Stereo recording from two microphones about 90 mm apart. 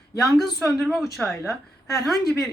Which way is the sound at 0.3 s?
Centre (ahead or behind).